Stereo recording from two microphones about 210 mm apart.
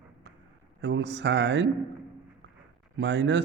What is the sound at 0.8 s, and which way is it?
Speech, 55° right (ahead or behind).